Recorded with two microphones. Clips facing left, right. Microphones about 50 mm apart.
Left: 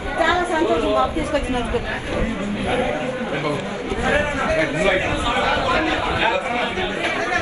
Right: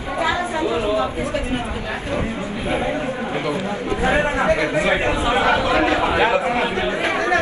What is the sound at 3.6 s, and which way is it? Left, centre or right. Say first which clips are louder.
A man's voice: right 2 dB; right.